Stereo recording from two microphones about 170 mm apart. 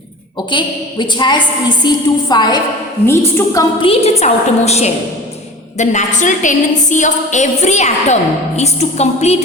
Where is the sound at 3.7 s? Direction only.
35° left (ahead or behind).